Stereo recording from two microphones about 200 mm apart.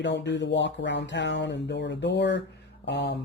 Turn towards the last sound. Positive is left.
turn(degrees=60)  # may be behind; listen again after turning